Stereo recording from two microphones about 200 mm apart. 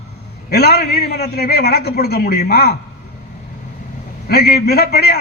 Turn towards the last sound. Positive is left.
turn(degrees=55)  # may be behind; listen again after turning